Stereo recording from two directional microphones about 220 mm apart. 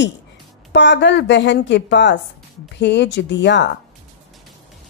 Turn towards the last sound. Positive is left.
turn(degrees=50)  # may be behind; listen again after turning